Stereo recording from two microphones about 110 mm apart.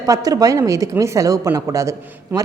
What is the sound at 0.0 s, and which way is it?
Speech, 35° right (ahead or behind).